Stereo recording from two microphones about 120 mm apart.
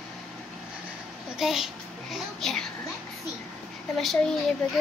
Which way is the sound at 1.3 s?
5° right (ahead or behind).